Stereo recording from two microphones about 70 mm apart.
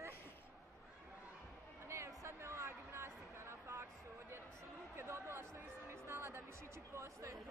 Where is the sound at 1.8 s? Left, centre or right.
Right.